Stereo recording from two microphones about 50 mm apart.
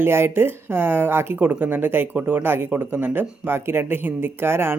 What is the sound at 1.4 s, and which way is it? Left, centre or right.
Speech, right.